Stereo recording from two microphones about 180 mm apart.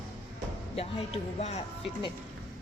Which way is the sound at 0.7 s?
35° left (ahead or behind).